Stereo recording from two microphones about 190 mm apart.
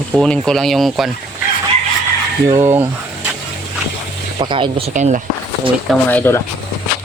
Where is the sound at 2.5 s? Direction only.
15° right (ahead or behind).